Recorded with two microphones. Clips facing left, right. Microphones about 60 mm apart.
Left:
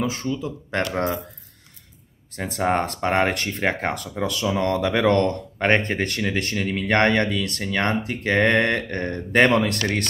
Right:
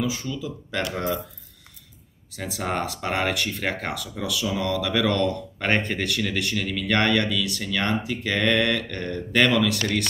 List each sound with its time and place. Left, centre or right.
0.0 s speech: left
2.3 s speech: left
5.0 s a man's voice: left
5.6 s speech: left